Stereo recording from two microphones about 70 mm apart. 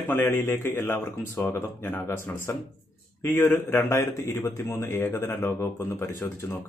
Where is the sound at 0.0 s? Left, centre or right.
Left.